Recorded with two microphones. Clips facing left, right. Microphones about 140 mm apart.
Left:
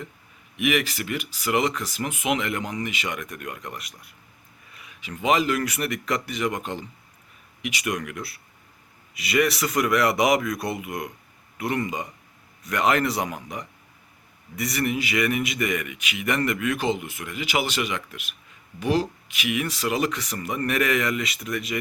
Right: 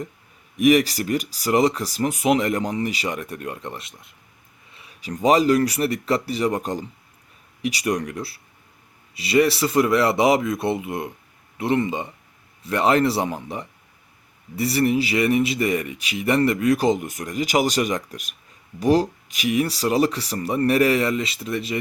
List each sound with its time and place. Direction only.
0.5 s speech: 40° right (ahead or behind)